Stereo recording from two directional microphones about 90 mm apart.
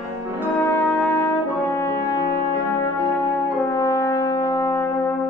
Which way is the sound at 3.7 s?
35° left (ahead or behind).